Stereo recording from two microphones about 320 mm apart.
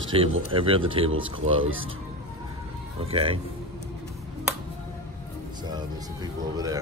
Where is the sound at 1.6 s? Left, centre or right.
Right.